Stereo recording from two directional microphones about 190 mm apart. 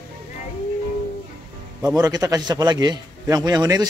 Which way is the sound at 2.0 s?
20° right (ahead or behind).